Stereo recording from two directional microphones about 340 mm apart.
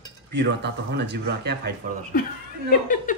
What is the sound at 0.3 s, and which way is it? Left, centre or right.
Speech, right.